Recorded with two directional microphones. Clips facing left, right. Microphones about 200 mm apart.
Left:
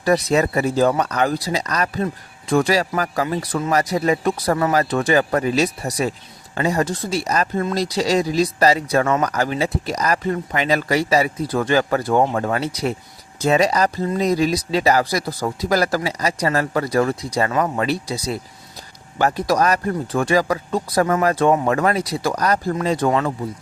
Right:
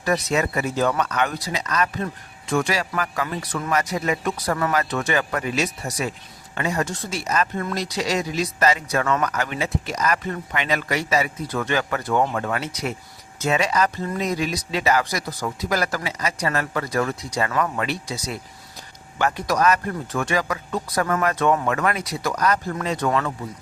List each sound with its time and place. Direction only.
0.0 s speech: 35° left (ahead or behind)